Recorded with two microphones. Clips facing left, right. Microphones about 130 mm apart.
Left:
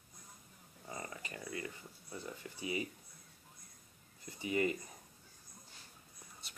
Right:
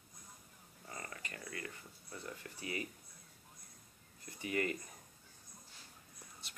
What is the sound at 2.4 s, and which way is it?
Speech, 20° left (ahead or behind).